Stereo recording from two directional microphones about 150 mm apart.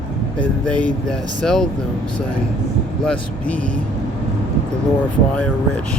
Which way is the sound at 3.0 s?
10° left (ahead or behind).